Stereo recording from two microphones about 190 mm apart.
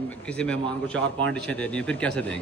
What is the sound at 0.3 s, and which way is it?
A man's voice, 5° left (ahead or behind).